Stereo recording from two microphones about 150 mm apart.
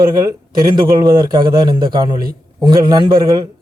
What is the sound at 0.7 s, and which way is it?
A man's voice, 25° right (ahead or behind).